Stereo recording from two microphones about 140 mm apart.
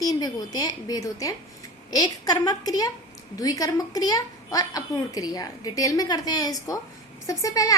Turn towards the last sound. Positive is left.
turn(degrees=25)  # may be behind; listen again after turning